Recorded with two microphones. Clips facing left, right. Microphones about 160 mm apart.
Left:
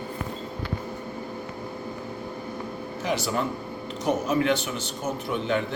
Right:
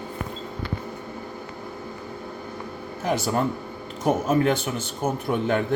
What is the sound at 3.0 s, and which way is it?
A man's voice, 50° right (ahead or behind).